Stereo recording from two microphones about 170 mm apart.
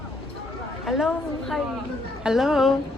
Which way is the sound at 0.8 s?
Centre (ahead or behind).